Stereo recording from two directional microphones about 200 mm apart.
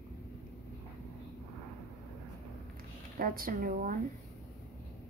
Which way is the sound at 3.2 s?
45° right (ahead or behind).